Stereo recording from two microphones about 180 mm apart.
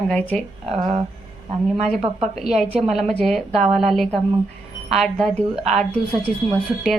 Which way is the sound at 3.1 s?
Centre (ahead or behind).